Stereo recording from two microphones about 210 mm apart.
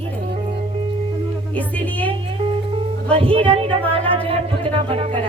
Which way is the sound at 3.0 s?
25° right (ahead or behind).